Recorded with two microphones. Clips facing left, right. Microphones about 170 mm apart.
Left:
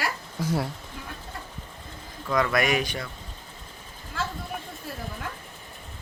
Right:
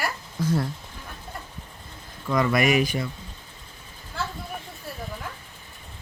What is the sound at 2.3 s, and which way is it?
Speech, centre (ahead or behind).